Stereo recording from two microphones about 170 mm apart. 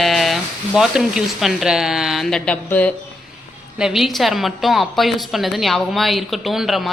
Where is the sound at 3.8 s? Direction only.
5° right (ahead or behind).